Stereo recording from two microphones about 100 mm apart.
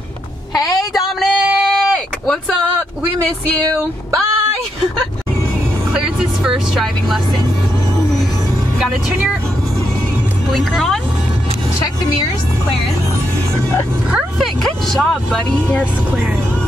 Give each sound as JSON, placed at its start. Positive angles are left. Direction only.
{"t": 0.6, "sound": "a sound", "side_deg": 35}
{"t": 0.9, "sound": "a sound", "side_deg": 0}
{"t": 5.9, "sound": "speech", "side_deg": -5}
{"t": 8.7, "sound": "speech", "side_deg": -10}
{"t": 10.5, "sound": "speech", "side_deg": 0}
{"t": 14.4, "sound": "speech", "side_deg": 5}